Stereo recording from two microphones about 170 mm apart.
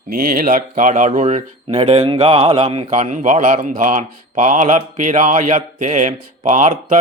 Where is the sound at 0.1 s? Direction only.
55° right (ahead or behind).